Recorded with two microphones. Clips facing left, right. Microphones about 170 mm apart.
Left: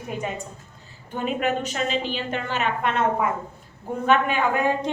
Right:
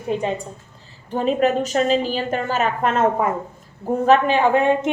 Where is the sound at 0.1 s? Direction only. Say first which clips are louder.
Right 8 dB; 30° right (ahead or behind).